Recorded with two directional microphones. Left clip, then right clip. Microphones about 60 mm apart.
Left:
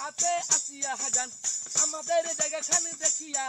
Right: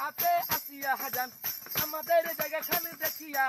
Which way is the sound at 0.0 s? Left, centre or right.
Centre.